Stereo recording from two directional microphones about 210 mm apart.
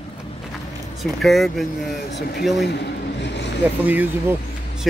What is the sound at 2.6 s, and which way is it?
Vehicle, 55° left (ahead or behind).